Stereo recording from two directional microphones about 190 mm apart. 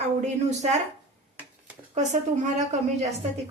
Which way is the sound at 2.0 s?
40° right (ahead or behind).